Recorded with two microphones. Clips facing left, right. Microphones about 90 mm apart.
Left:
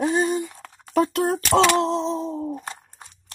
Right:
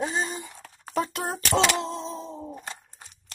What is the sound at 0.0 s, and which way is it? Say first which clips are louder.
Speech: left 8 dB; 45° left (ahead or behind).